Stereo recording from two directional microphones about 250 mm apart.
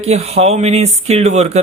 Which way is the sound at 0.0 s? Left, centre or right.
Right.